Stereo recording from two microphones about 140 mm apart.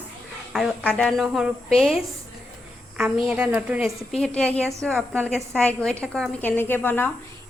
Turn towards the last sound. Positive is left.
turn(degrees=15)  # may be behind; listen again after turning